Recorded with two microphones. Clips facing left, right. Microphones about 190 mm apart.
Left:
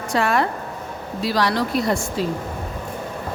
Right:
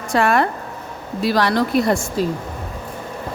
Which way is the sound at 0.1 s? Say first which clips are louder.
Right 3 dB; 55° right (ahead or behind).